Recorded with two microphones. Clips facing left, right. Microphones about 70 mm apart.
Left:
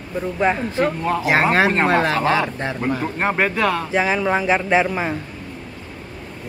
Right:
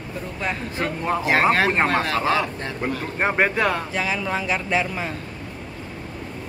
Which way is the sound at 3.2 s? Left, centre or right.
Centre.